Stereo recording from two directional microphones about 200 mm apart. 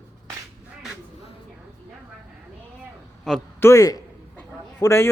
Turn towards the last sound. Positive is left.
turn(degrees=15)  # may be behind; listen again after turning